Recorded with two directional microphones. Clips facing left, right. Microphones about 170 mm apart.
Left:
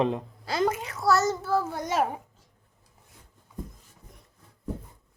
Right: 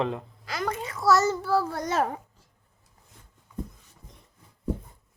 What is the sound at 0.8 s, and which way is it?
Speech, centre (ahead or behind).